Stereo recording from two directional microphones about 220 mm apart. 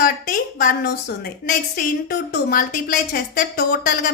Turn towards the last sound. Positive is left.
turn(degrees=40)  # may be behind; listen again after turning